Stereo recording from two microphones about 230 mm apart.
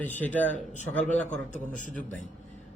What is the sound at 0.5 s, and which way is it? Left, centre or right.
Speech, left.